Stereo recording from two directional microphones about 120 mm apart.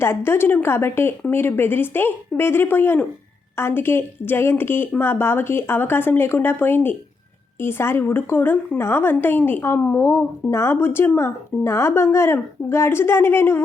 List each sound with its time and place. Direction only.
0.0 s a woman's voice: 20° left (ahead or behind)